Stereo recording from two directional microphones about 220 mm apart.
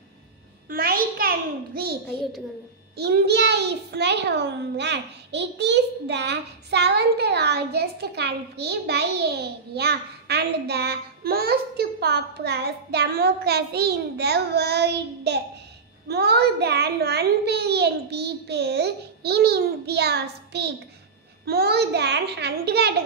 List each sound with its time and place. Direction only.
0.7 s a child's voice: 40° right (ahead or behind)
3.0 s a child's voice: 45° right (ahead or behind)